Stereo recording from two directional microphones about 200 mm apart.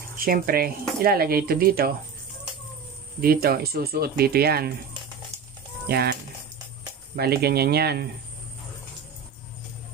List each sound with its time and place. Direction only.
0.2 s speech: 45° right (ahead or behind)
3.2 s speech: 50° right (ahead or behind)
5.9 s speech: 50° right (ahead or behind)
7.2 s speech: 50° right (ahead or behind)